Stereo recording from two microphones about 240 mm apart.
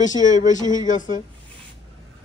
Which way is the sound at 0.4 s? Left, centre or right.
Left.